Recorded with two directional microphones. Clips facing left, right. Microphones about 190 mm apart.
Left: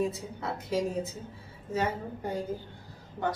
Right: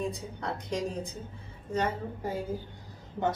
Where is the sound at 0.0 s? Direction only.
5° left (ahead or behind).